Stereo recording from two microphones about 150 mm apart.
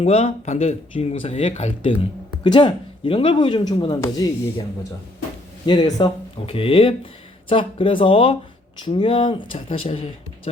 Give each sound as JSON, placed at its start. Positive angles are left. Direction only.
{"t": 0.0, "sound": "speech", "side_deg": 45}
{"t": 4.0, "sound": "speech", "side_deg": 20}
{"t": 5.6, "sound": "speech", "side_deg": 30}